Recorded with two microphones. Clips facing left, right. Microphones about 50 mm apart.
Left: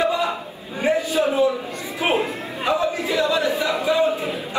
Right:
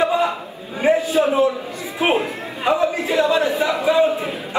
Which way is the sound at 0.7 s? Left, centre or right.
Right.